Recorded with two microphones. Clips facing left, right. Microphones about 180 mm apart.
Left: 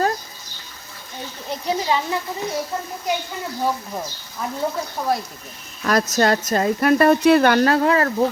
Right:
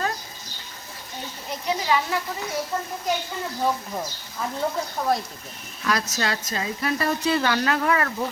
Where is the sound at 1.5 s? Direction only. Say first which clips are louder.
Left 2 dB; 30° left (ahead or behind).